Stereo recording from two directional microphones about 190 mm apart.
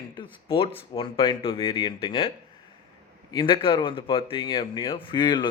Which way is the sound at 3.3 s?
25° left (ahead or behind).